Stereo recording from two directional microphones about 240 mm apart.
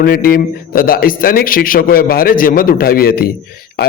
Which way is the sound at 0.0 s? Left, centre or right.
Left.